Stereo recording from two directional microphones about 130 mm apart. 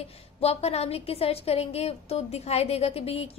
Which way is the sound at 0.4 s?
50° left (ahead or behind).